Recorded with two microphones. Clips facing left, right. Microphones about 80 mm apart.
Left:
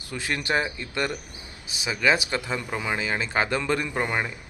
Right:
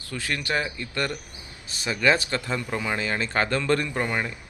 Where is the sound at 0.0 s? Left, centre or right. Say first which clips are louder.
Left 1 dB; left.